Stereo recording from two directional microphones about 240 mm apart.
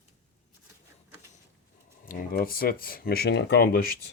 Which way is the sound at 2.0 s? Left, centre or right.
Left.